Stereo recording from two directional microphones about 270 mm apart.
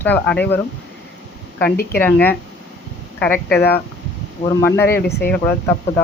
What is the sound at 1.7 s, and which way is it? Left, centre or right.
Speech, left.